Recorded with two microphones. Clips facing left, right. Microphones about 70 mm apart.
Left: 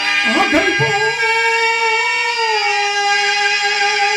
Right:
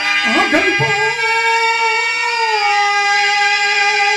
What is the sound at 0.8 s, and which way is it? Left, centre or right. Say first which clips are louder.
Music: even; right.